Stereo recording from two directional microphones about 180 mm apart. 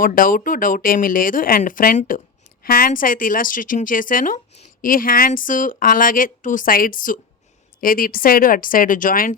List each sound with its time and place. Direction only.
0.0 s speech: 50° left (ahead or behind)